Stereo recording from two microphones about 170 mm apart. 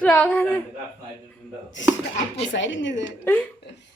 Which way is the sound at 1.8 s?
90° left.